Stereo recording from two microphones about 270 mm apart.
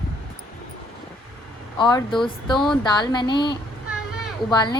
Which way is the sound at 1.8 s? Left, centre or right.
Centre.